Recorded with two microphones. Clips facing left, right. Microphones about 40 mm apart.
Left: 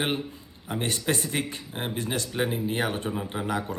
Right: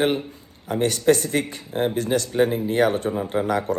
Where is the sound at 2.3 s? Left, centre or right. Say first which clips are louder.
Right 8 dB; centre.